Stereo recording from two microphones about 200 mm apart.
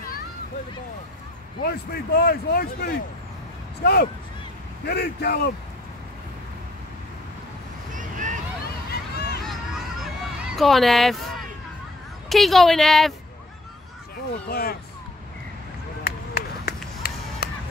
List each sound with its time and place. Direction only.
1.6 s speech: 50° left (ahead or behind)
7.9 s vehicle: 40° right (ahead or behind)
9.1 s a sound: 55° left (ahead or behind)
10.4 s speech: centre (ahead or behind)
12.3 s a woman's voice: centre (ahead or behind)
14.5 s speech: 50° left (ahead or behind)
16.0 s run: 50° left (ahead or behind)
17.0 s a sound: 50° left (ahead or behind)
17.4 s music: 50° left (ahead or behind)